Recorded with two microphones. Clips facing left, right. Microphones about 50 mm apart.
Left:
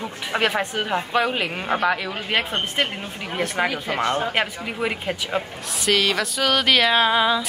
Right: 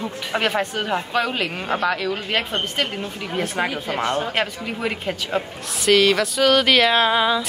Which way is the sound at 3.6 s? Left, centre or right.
Centre.